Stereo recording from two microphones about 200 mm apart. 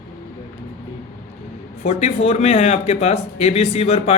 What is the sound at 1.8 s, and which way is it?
A man's voice, 30° left (ahead or behind).